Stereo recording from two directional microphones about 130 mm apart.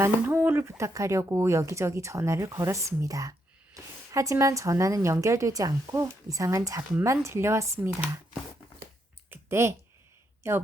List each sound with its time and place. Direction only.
0.0 s speech: 15° right (ahead or behind)
9.3 s clicking: 20° right (ahead or behind)
10.4 s speech: 20° right (ahead or behind)